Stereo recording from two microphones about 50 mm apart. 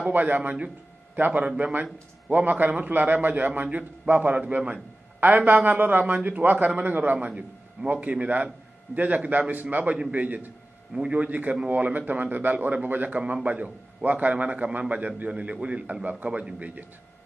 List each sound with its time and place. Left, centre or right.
0.1 s a man's voice: right
0.4 s a man's voice: right
1.1 s a man's voice: right
13.2 s a man's voice: right